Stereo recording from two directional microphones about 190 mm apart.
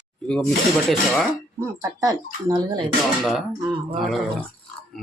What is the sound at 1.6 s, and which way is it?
Speech, 15° right (ahead or behind).